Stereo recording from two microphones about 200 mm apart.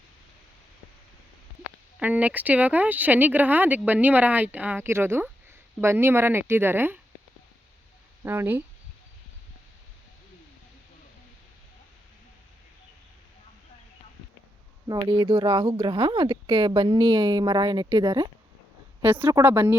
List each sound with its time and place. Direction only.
2.0 s speech: 5° right (ahead or behind)
8.2 s speech: 10° right (ahead or behind)
14.8 s speech: 25° right (ahead or behind)
19.0 s speech: 10° right (ahead or behind)